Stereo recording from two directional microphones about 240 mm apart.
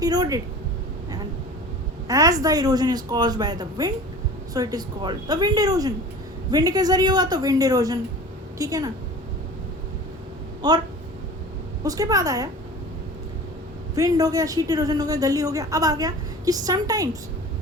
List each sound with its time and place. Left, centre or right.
0.0 s speech: centre
2.0 s speech: centre
10.6 s speech: centre
13.9 s speech: centre